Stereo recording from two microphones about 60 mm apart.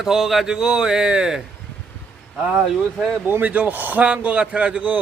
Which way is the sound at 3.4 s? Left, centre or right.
Right.